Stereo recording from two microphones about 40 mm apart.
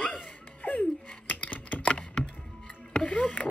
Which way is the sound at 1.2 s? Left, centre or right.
Left.